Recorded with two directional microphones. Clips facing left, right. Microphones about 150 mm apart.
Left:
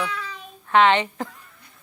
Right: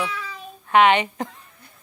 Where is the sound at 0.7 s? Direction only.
15° right (ahead or behind).